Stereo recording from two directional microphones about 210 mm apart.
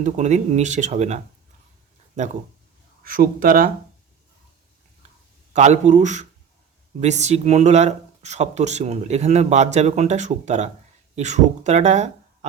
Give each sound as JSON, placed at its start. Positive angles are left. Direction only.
{"t": 0.0, "sound": "speech", "side_deg": -35}
{"t": 5.5, "sound": "speech", "side_deg": -35}